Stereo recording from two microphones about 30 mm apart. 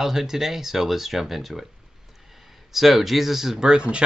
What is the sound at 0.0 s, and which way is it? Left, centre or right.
Speech, centre.